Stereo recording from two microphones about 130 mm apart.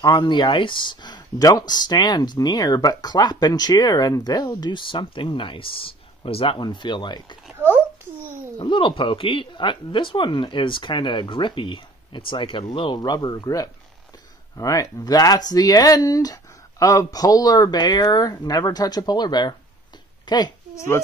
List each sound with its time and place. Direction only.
0.0 s speech: 30° left (ahead or behind)
7.5 s babbling: 15° right (ahead or behind)
8.5 s a woman's voice: 40° left (ahead or behind)